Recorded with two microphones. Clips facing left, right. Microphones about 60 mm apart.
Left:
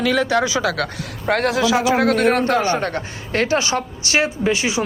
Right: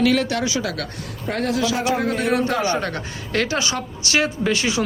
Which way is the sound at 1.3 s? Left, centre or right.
Left.